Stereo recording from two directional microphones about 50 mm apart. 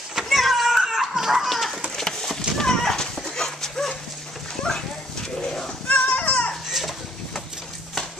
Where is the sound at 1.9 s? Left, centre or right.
Centre.